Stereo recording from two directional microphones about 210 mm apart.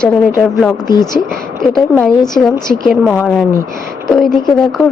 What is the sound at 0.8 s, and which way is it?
Speech, 20° left (ahead or behind).